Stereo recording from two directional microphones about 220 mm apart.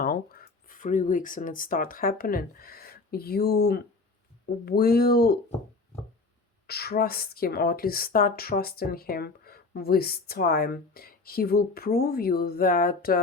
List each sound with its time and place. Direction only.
0.0 s speech: 40° left (ahead or behind)
6.7 s speech: 45° left (ahead or behind)